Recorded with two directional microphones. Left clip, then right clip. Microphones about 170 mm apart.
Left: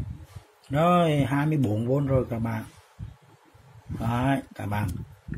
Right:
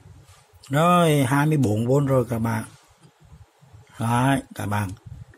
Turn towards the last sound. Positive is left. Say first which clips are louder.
# right 4 dB
turn(degrees=-30)  # may be behind; listen again after turning